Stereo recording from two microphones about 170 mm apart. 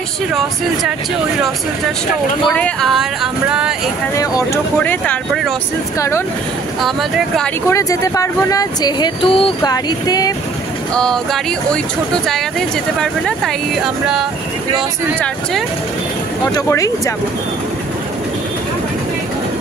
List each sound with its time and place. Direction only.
2.5 s speech: 5° left (ahead or behind)
4.1 s speech: 20° left (ahead or behind)
4.7 s speech: 10° left (ahead or behind)
6.8 s speech: centre (ahead or behind)
7.6 s speech: 20° left (ahead or behind)
11.0 s speech: 5° left (ahead or behind)
16.5 s speech: 20° left (ahead or behind)